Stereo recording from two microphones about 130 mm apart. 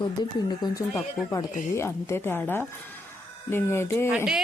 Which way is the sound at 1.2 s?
Centre (ahead or behind).